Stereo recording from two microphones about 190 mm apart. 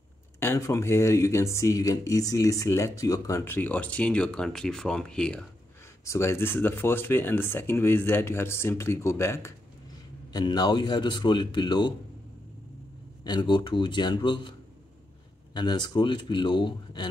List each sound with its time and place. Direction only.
0.4 s speech: 15° left (ahead or behind)
13.2 s speech: 20° left (ahead or behind)
15.5 s speech: 20° left (ahead or behind)